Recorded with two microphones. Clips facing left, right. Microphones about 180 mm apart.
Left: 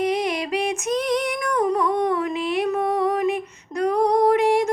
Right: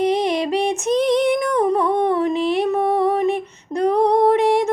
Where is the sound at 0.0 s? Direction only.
30° right (ahead or behind).